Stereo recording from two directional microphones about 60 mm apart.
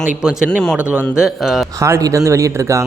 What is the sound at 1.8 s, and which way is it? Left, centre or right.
Speech, right.